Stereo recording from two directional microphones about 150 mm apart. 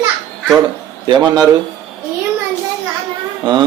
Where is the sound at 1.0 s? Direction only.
30° right (ahead or behind).